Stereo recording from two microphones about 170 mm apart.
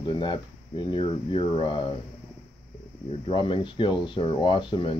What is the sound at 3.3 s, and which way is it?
Speech, 30° left (ahead or behind).